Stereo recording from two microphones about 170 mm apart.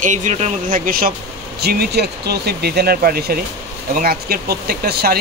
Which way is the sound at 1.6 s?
65° right (ahead or behind).